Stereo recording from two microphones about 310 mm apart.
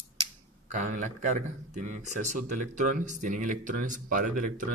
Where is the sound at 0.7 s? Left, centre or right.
Right.